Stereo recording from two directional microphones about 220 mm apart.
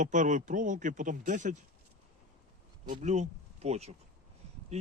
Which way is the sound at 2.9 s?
35° right (ahead or behind).